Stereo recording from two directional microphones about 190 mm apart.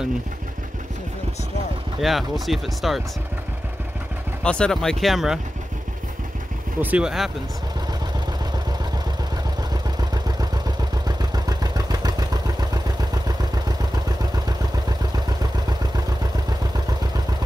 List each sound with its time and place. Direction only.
2.0 s speech: centre (ahead or behind)
4.4 s speech: 5° left (ahead or behind)
6.8 s speech: 5° right (ahead or behind)
9.9 s vehicle: 20° right (ahead or behind)
14.9 s vehicle: 20° right (ahead or behind)